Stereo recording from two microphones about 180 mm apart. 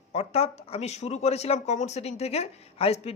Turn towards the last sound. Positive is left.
turn(degrees=35)  # may be behind; listen again after turning